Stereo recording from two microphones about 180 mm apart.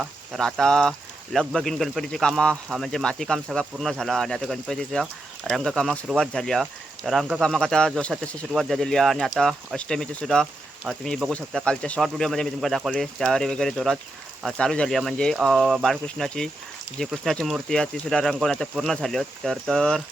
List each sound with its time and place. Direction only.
0.0 s speech: centre (ahead or behind)